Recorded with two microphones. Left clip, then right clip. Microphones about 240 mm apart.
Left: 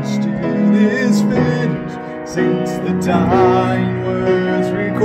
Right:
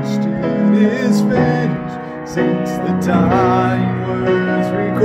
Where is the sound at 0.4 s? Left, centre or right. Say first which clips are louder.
Even; right.